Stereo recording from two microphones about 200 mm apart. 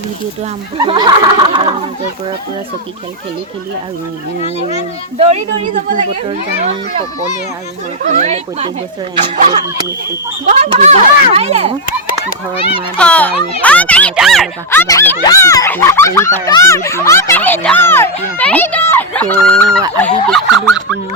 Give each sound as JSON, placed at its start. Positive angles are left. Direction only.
{"t": 0.8, "sound": "a sound", "side_deg": -20}
{"t": 5.1, "sound": "a child's voice", "side_deg": -30}
{"t": 8.1, "sound": "a child's voice", "side_deg": -35}
{"t": 10.4, "sound": "a child's voice", "side_deg": -35}
{"t": 13.0, "sound": "speech", "side_deg": 5}
{"t": 14.7, "sound": "speech", "side_deg": 15}